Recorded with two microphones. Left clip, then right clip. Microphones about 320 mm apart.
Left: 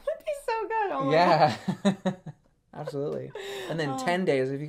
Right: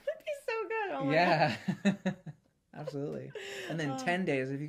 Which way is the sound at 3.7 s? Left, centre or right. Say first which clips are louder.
Left 5 dB; left.